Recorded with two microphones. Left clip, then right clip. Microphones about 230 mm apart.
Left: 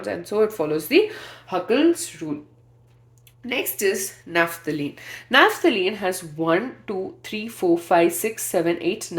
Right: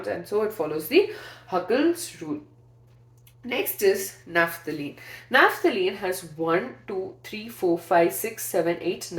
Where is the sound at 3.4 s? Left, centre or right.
Left.